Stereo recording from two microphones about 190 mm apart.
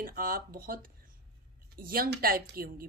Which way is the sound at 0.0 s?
50° right (ahead or behind).